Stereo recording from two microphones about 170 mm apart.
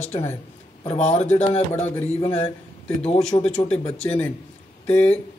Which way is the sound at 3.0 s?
40° left (ahead or behind).